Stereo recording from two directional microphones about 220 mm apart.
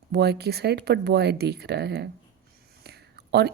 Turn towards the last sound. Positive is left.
turn(degrees=-50)  # may be behind; listen again after turning